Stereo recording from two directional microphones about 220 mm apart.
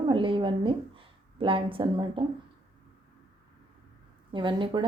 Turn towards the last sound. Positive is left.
turn(degrees=-20)  # may be behind; listen again after turning